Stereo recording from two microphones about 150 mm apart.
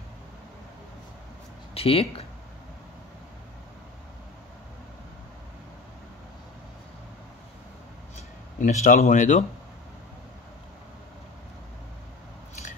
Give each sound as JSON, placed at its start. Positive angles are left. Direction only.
{"t": 1.7, "sound": "speech", "side_deg": 40}
{"t": 8.5, "sound": "speech", "side_deg": 55}